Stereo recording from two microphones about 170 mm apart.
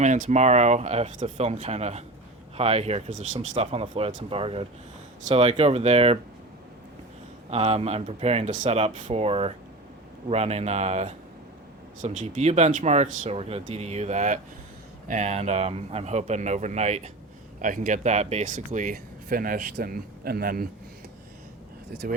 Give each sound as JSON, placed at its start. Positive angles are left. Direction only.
{"t": 0.0, "sound": "speech", "side_deg": -45}
{"t": 3.5, "sound": "speech", "side_deg": -35}
{"t": 7.5, "sound": "speech", "side_deg": -35}